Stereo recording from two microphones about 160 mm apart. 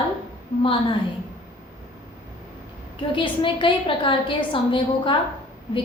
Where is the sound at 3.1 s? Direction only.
30° left (ahead or behind).